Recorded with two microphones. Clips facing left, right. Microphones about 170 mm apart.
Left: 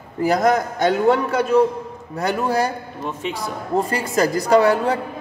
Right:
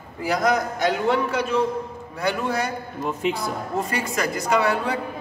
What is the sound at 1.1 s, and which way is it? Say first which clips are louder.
A man's voice: left 5 dB; 45° left (ahead or behind).